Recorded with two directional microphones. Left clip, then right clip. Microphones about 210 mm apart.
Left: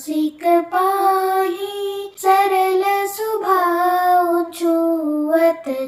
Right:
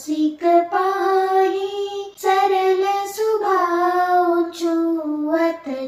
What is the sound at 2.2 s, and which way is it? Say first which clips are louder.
Child singing: left 2 dB; 30° left (ahead or behind).